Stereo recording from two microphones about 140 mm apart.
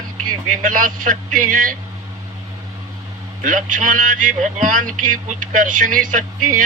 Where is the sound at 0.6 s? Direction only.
70° right (ahead or behind).